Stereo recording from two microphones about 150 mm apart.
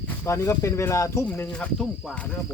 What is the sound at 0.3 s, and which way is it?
Speech, 20° left (ahead or behind).